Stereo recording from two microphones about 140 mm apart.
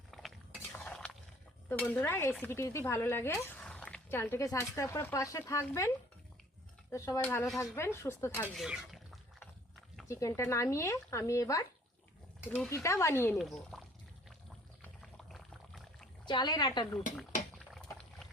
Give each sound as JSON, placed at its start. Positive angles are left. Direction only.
{"t": 0.1, "sound": "stir", "side_deg": 0}
{"t": 1.8, "sound": "speech", "side_deg": 10}
{"t": 3.6, "sound": "speech", "side_deg": 5}
{"t": 6.9, "sound": "speech", "side_deg": 20}
{"t": 8.5, "sound": "speech", "side_deg": -5}
{"t": 10.1, "sound": "speech", "side_deg": 20}
{"t": 13.4, "sound": "speech", "side_deg": 0}
{"t": 15.3, "sound": "pour", "side_deg": 0}
{"t": 16.2, "sound": "speech", "side_deg": 30}
{"t": 17.7, "sound": "pour", "side_deg": 0}